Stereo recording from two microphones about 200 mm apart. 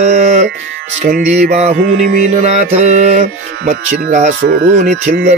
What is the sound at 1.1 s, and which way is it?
Speech, 35° right (ahead or behind).